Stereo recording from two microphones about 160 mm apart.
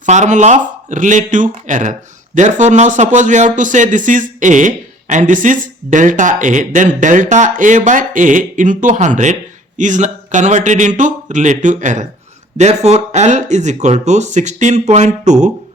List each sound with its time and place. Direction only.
0.0 s a man's voice: 50° right (ahead or behind)